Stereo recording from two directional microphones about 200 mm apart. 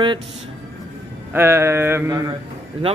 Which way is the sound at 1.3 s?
10° right (ahead or behind).